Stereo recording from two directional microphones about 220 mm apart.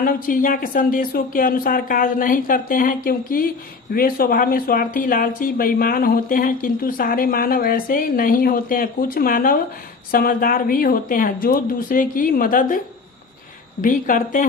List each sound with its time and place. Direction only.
0.0 s speech: 40° left (ahead or behind)
13.8 s speech: 35° left (ahead or behind)